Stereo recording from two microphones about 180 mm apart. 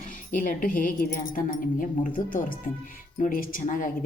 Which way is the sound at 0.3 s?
50° left (ahead or behind).